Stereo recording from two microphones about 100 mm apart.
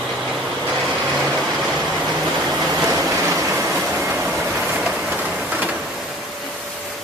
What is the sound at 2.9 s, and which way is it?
Waves, 30° right (ahead or behind).